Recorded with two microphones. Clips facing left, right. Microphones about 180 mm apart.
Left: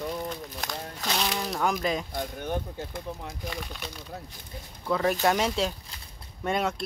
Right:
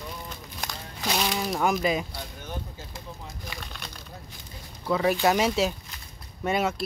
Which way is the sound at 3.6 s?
10° left (ahead or behind).